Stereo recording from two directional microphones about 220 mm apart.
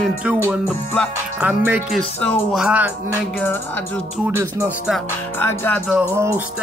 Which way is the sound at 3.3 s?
10° left (ahead or behind).